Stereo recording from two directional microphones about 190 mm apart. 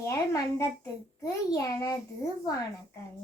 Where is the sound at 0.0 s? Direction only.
15° left (ahead or behind).